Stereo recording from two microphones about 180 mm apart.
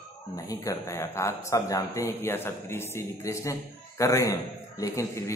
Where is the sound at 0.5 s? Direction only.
15° left (ahead or behind).